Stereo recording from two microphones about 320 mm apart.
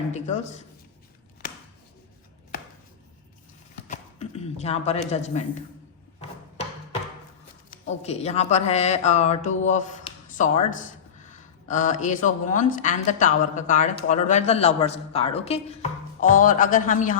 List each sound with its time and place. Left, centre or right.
0.1 s a man's voice: left
3.8 s speech: left
7.7 s a man's voice: left